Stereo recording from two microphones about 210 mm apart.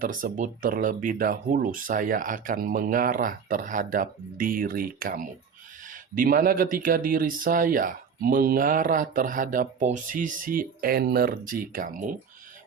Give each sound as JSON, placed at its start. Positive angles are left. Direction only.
{"t": 0.0, "sound": "speech", "side_deg": -40}